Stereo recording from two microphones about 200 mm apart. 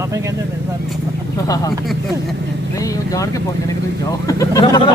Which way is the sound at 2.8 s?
15° left (ahead or behind).